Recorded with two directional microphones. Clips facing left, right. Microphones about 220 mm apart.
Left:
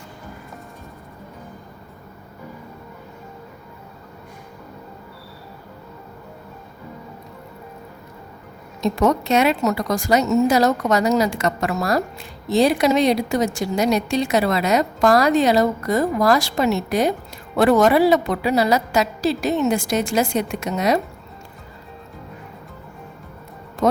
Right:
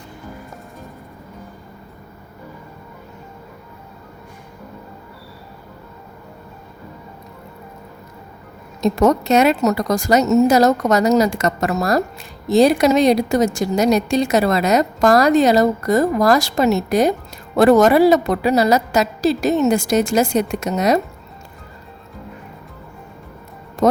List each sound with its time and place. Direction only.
8.8 s a woman's voice: 45° right (ahead or behind)